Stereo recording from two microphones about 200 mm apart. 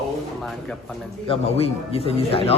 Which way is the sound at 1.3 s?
30° left (ahead or behind).